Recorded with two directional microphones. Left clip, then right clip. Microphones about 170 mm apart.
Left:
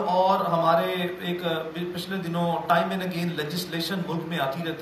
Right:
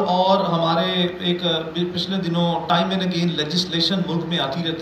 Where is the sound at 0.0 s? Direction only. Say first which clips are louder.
Right 4 dB; 50° left (ahead or behind).